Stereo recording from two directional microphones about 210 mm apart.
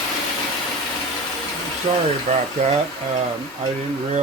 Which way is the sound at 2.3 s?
35° right (ahead or behind).